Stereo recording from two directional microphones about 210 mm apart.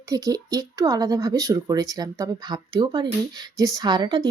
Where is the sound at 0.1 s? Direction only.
15° right (ahead or behind).